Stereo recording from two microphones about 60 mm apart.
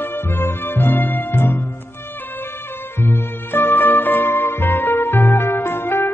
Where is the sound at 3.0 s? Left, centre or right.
Left.